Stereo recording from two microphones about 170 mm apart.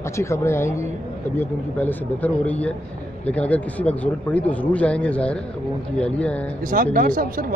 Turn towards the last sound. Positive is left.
turn(degrees=-55)  # may be behind; listen again after turning